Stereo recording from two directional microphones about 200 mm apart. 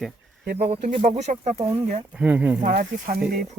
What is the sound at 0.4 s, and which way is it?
Speech, 50° right (ahead or behind).